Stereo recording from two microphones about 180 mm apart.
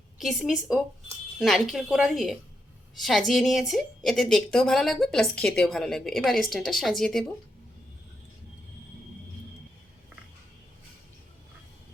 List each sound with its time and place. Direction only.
0.2 s a woman's voice: centre (ahead or behind)